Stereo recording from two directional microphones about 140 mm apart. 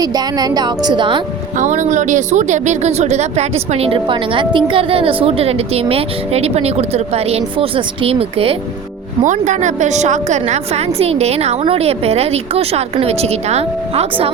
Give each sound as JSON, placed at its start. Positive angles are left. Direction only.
{"t": 0.0, "sound": "a woman's voice", "side_deg": -25}
{"t": 1.5, "sound": "speech", "side_deg": -60}
{"t": 9.2, "sound": "speech", "side_deg": -60}